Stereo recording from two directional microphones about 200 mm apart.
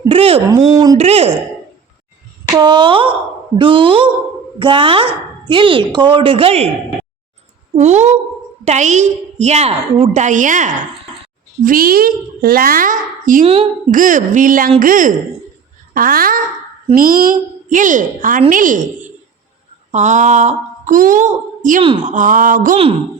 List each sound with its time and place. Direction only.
0.1 s a woman's voice: 30° right (ahead or behind)
0.3 s speech: 15° right (ahead or behind)
0.9 s speech: 30° right (ahead or behind)
2.6 s speech: 20° right (ahead or behind)
7.8 s a woman's voice: 35° right (ahead or behind)
13.4 s speech: 25° right (ahead or behind)
13.9 s a woman's voice: 40° right (ahead or behind)
19.9 s speech: 35° right (ahead or behind)
21.8 s speech: 25° right (ahead or behind)
22.1 s a woman's voice: 40° right (ahead or behind)